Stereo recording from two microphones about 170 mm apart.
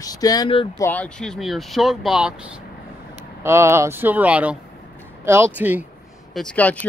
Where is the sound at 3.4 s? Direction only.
15° right (ahead or behind).